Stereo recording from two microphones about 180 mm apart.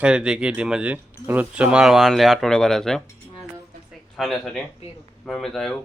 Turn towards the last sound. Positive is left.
turn(degrees=0)  # may be behind; listen again after turning